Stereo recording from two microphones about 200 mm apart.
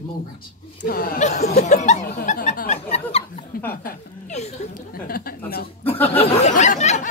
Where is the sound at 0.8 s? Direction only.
45° left (ahead or behind).